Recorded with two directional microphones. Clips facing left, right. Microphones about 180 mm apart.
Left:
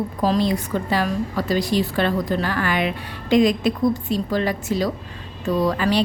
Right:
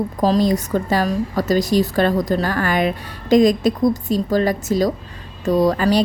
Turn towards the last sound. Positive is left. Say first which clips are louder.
# right 4 dB
turn(degrees=-40)  # may be behind; listen again after turning